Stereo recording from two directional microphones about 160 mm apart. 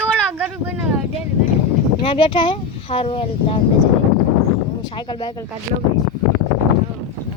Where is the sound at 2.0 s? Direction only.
30° left (ahead or behind).